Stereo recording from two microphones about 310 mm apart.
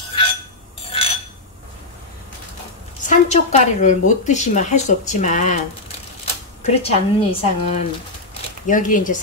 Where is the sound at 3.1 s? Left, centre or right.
Left.